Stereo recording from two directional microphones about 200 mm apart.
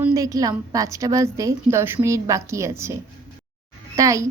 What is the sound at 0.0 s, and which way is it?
A woman's voice, 15° right (ahead or behind).